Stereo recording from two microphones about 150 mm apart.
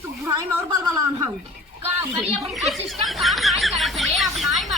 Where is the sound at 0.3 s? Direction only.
25° right (ahead or behind).